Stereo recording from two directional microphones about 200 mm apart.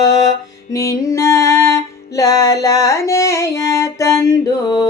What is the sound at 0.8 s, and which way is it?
Music, 15° left (ahead or behind).